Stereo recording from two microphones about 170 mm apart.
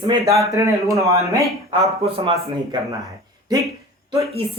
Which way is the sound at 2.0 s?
35° right (ahead or behind).